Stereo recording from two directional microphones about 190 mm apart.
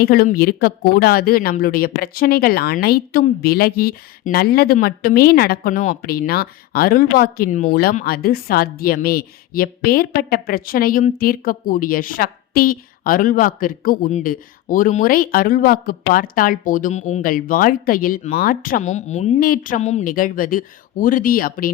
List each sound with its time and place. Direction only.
0.0 s a woman's voice: 55° left (ahead or behind)